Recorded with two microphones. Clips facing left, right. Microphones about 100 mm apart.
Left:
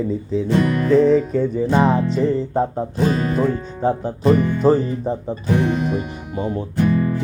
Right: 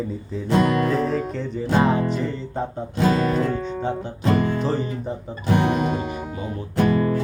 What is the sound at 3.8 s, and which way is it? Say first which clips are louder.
Speech: left 8 dB; 40° left (ahead or behind).